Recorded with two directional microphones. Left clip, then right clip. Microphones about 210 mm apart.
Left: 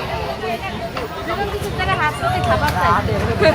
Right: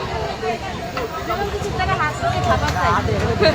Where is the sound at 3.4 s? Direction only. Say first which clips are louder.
Left 2 dB; 15° left (ahead or behind).